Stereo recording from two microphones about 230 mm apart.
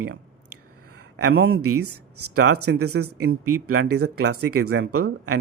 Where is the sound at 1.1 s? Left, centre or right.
Right.